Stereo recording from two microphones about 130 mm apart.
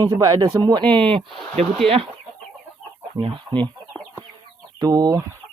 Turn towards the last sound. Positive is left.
turn(degrees=-25)  # may be behind; listen again after turning